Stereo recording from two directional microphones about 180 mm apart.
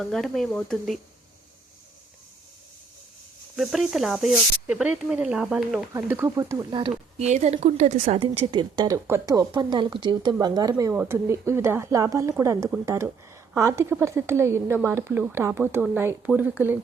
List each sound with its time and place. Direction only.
0.0 s speech: centre (ahead or behind)
3.5 s speech: centre (ahead or behind)
5.9 s a woman's voice: 15° right (ahead or behind)
7.2 s a woman's voice: 40° right (ahead or behind); by 16.7 s 10° right (ahead or behind)